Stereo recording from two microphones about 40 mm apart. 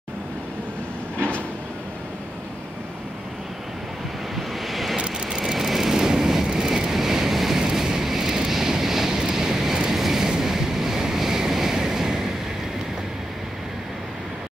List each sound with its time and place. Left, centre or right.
4.4 s vehicle: centre
4.9 s vehicle: right
5.4 s vehicle: centre